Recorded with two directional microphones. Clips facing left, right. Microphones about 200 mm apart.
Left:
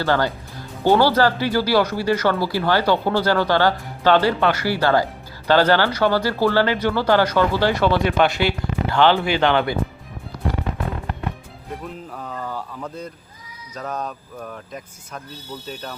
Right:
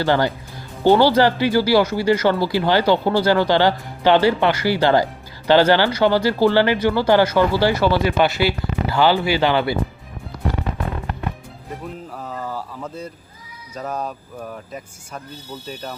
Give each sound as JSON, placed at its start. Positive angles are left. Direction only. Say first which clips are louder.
{"t": 0.0, "sound": "speech", "louder": "right 2 dB", "side_deg": -15}
{"t": 12.1, "sound": "a sound", "louder": "right 1 dB", "side_deg": -5}
{"t": 13.7, "sound": "speech", "louder": "right 2 dB", "side_deg": -10}